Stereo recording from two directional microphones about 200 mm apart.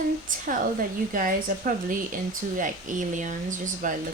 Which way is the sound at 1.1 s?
45° right (ahead or behind).